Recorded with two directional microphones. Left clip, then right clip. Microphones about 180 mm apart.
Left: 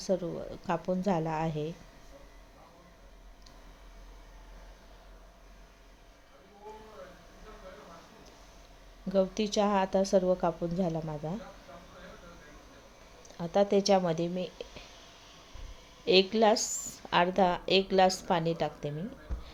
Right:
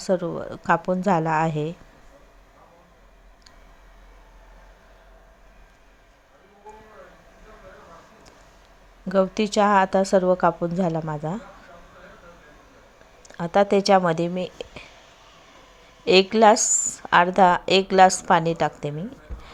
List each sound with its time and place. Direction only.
0.0 s a woman's voice: 15° right (ahead or behind)
9.0 s a woman's voice: 15° right (ahead or behind)
13.2 s a woman's voice: 20° right (ahead or behind)
16.0 s a woman's voice: 15° right (ahead or behind)